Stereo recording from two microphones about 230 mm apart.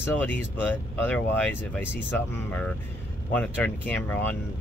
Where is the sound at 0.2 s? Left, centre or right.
Centre.